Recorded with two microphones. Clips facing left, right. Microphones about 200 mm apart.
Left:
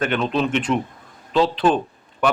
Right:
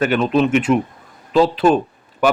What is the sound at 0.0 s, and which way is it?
Speech, 5° right (ahead or behind).